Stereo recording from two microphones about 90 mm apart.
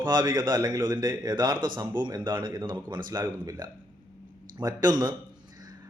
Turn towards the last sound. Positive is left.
turn(degrees=-50)  # may be behind; listen again after turning